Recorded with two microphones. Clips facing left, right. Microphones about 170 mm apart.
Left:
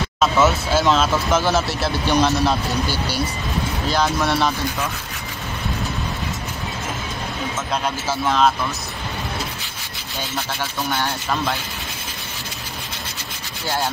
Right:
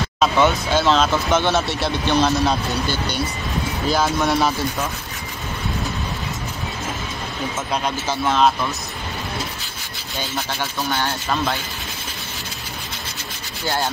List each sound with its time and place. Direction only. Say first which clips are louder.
0.2 s speech: even; 5° left (ahead or behind)
8.1 s speech: even; centre (ahead or behind)
10.9 s speech: even; 5° left (ahead or behind)